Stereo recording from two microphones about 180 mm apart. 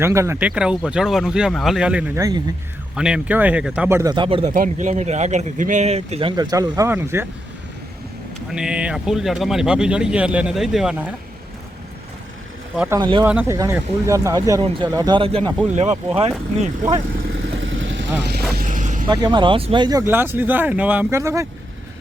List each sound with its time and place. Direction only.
0.0 s speech: 15° right (ahead or behind)
4.1 s speech: 30° right (ahead or behind)
4.5 s speech: 45° right (ahead or behind); by 7.3 s 15° right (ahead or behind)
8.4 s speech: 5° right (ahead or behind)
12.9 s speech: 25° right (ahead or behind)
13.2 s speech: 10° right (ahead or behind); by 16.3 s 35° right (ahead or behind)
16.8 s speech: 45° right (ahead or behind)
17.6 s vehicle: 90° right
18.2 s vehicle: 65° right (ahead or behind)
18.5 s vehicle: 45° right (ahead or behind)
19.0 s speech: 25° right (ahead or behind)